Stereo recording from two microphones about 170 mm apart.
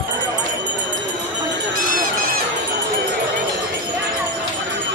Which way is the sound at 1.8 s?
50° right (ahead or behind).